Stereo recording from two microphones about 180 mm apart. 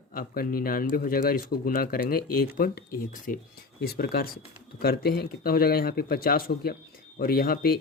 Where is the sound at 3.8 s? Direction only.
55° left (ahead or behind).